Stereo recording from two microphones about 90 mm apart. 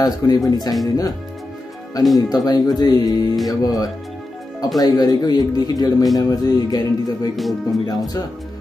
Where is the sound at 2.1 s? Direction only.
45° left (ahead or behind).